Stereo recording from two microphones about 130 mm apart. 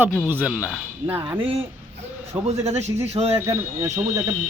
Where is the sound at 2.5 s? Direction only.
55° right (ahead or behind).